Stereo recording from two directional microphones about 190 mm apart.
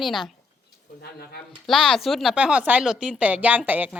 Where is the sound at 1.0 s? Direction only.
55° left (ahead or behind).